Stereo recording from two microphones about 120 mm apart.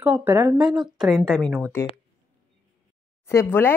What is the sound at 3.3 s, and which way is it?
Speech, 20° left (ahead or behind).